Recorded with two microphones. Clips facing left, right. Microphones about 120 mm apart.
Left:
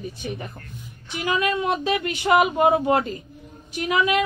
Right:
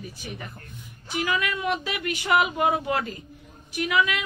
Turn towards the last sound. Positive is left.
turn(degrees=25)  # may be behind; listen again after turning